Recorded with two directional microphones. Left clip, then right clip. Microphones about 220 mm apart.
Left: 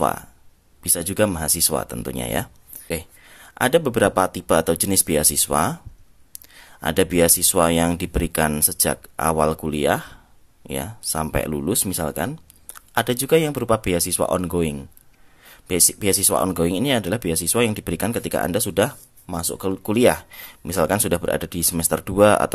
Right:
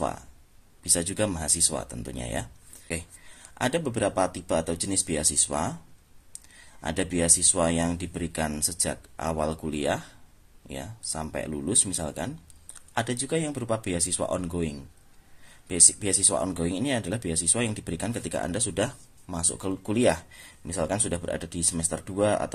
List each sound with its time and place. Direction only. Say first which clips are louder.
0.8 s speech: left 6 dB; 30° left (ahead or behind)